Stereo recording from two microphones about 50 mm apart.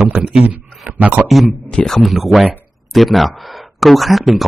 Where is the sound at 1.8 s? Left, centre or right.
Centre.